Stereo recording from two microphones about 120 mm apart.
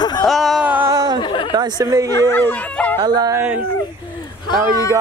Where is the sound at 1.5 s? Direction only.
35° right (ahead or behind).